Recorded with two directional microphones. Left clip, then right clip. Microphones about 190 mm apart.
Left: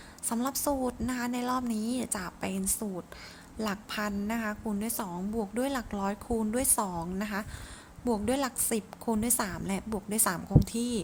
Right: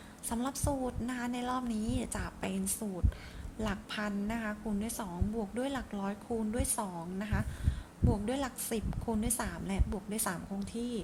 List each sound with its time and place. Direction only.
0.3 s a woman's voice: 15° left (ahead or behind)